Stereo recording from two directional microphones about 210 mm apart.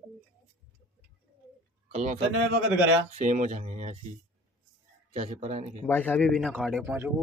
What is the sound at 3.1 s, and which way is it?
Speech, 35° right (ahead or behind).